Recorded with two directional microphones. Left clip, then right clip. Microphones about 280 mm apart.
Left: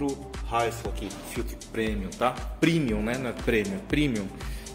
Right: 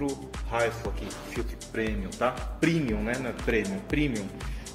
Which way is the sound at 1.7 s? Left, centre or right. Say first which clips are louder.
Left 1 dB; centre.